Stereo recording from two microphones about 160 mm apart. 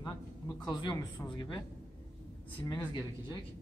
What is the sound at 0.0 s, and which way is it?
Speech, 25° left (ahead or behind).